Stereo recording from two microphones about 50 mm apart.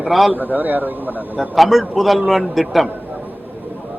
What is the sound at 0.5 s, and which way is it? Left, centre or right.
Speech, right.